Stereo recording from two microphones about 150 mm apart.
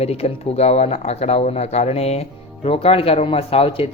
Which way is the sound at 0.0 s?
45° left (ahead or behind).